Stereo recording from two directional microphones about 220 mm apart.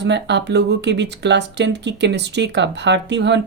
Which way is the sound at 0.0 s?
50° right (ahead or behind).